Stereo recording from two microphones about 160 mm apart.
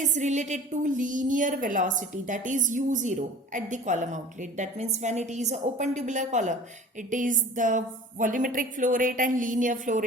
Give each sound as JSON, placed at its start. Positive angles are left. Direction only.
{"t": 0.0, "sound": "a woman's voice", "side_deg": -50}